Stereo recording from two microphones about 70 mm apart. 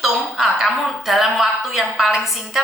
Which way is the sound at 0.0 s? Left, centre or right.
Centre.